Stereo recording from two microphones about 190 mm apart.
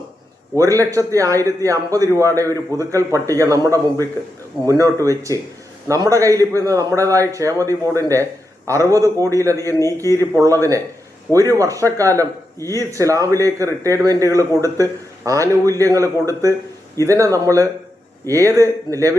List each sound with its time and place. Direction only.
0.5 s speech: 15° right (ahead or behind)